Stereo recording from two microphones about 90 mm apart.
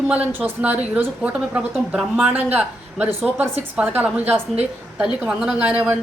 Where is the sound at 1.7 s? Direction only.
5° right (ahead or behind).